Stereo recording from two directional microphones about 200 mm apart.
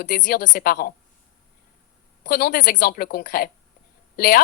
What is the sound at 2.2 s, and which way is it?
A woman's voice, 50° left (ahead or behind).